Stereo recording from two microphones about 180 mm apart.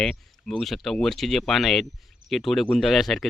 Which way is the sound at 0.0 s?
5° left (ahead or behind).